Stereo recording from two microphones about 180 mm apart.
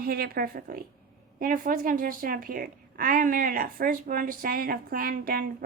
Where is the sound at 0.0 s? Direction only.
55° right (ahead or behind).